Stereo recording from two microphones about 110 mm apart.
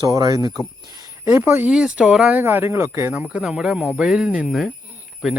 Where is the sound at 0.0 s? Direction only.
35° right (ahead or behind).